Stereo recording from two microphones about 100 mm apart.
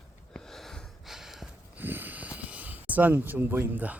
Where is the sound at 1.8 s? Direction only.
20° right (ahead or behind).